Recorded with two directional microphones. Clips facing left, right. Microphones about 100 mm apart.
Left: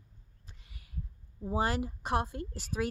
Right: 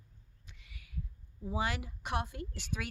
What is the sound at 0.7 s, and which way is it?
Heart sounds, 35° left (ahead or behind).